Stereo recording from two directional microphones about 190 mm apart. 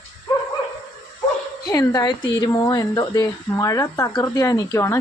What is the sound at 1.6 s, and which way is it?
Speech, 20° left (ahead or behind).